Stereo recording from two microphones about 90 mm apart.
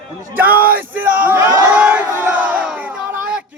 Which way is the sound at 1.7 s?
15° right (ahead or behind).